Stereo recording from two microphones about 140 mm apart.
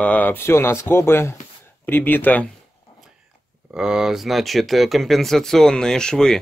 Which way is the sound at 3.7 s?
5° right (ahead or behind).